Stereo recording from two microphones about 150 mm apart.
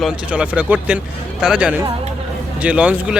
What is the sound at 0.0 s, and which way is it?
Speech, 5° right (ahead or behind).